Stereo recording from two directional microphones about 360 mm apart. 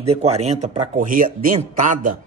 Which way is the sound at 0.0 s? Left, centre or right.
Centre.